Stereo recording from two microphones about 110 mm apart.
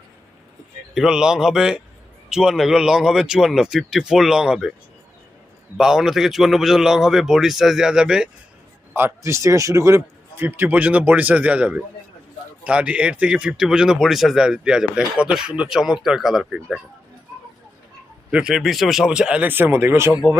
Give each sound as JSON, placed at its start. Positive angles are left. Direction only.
{"t": 0.9, "sound": "speech", "side_deg": -5}
{"t": 5.7, "sound": "speech", "side_deg": -5}
{"t": 8.9, "sound": "a man's voice", "side_deg": -20}
{"t": 18.3, "sound": "a man's voice", "side_deg": -10}